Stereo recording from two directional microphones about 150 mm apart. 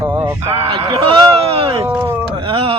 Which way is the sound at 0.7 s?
35° right (ahead or behind).